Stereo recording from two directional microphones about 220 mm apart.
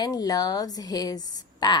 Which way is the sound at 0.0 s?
15° left (ahead or behind).